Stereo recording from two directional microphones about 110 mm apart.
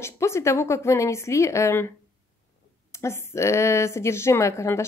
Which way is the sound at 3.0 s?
25° left (ahead or behind).